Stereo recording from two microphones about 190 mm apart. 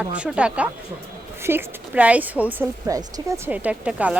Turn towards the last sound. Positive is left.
turn(degrees=-5)  # may be behind; listen again after turning